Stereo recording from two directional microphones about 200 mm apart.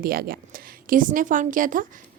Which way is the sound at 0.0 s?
50° right (ahead or behind).